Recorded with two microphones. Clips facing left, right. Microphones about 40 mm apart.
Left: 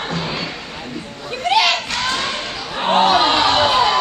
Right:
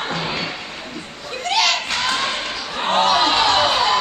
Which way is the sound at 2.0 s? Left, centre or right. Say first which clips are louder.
Even; centre.